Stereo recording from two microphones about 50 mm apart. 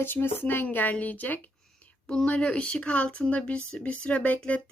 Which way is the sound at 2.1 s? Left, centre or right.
Centre.